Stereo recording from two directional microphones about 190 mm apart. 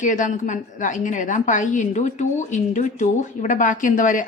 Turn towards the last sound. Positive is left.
turn(degrees=45)  # may be behind; listen again after turning